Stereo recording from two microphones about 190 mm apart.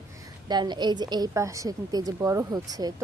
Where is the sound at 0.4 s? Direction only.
25° right (ahead or behind).